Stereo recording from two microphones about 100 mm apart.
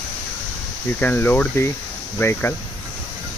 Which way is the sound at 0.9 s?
20° left (ahead or behind).